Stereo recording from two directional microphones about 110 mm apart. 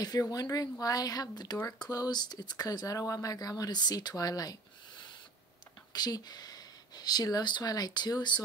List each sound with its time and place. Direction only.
0.0 s speech: 35° left (ahead or behind)
5.9 s speech: 40° left (ahead or behind)